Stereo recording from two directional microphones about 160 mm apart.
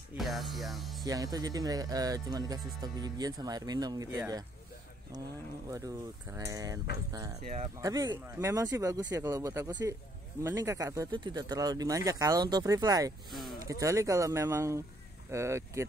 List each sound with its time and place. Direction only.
0.2 s music: centre (ahead or behind)
1.0 s speech: 20° right (ahead or behind)
5.7 s speech: 20° right (ahead or behind)
7.8 s speech: 25° right (ahead or behind)
13.3 s speech: centre (ahead or behind)
13.7 s speech: 20° right (ahead or behind)